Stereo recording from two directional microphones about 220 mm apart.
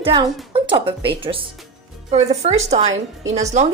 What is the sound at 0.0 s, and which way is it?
A woman's voice, 20° right (ahead or behind).